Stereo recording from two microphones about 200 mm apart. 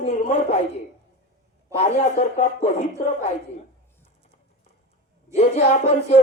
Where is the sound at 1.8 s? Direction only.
35° left (ahead or behind).